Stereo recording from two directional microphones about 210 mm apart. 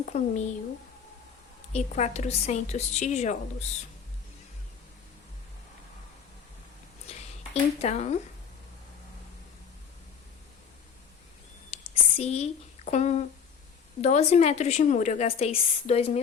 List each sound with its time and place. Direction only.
0.0 s a woman's voice: 35° left (ahead or behind)
1.7 s a woman's voice: 30° left (ahead or behind)
7.1 s a sound: 30° left (ahead or behind)
7.8 s a woman's voice: 30° left (ahead or behind)
11.7 s a woman's voice: 30° left (ahead or behind)